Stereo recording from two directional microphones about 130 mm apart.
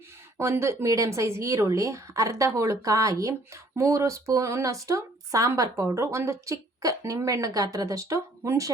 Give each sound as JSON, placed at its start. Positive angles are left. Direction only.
{"t": 0.3, "sound": "a woman's voice", "side_deg": -20}